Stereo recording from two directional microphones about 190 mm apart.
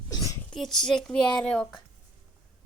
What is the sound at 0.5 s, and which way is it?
A child's voice, centre (ahead or behind).